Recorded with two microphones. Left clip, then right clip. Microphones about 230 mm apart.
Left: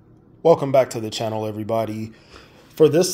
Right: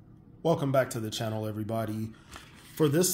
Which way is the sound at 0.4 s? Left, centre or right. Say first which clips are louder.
Left 11 dB; centre.